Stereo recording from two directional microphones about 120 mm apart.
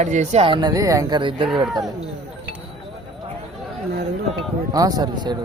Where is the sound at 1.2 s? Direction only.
40° right (ahead or behind).